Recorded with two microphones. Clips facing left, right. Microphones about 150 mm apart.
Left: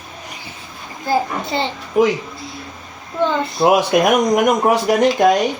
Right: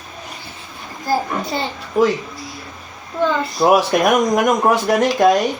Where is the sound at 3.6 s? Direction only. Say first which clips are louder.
Even; 25° left (ahead or behind).